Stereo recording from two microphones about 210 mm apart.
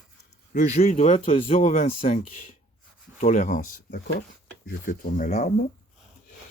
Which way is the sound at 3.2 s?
35° left (ahead or behind).